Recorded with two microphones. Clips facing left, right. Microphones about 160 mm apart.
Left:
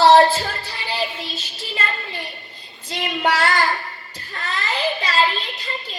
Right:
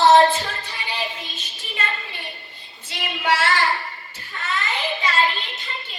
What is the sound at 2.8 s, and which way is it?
Child singing, 40° left (ahead or behind).